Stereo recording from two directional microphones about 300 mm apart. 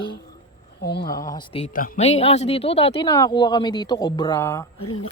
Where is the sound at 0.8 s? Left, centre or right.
Left.